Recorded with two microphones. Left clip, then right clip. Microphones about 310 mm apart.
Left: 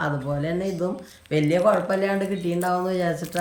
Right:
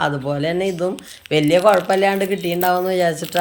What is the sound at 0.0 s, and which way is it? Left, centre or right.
Speech, centre.